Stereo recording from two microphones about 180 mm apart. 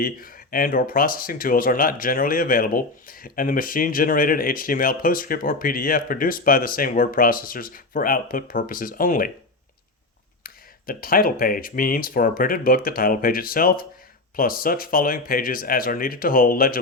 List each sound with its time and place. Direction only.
0.0 s speech: 55° left (ahead or behind)
10.4 s speech: 55° left (ahead or behind)